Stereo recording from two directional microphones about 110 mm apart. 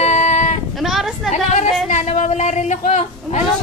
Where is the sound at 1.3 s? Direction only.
90° left.